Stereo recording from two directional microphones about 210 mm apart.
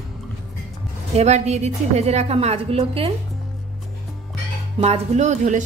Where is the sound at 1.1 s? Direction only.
30° right (ahead or behind).